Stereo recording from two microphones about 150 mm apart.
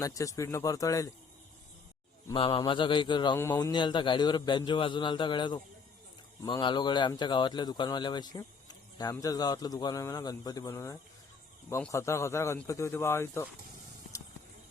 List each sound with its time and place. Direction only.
0.0 s a man's voice: 20° left (ahead or behind)
2.3 s a man's voice: 35° left (ahead or behind); by 13.5 s 15° left (ahead or behind)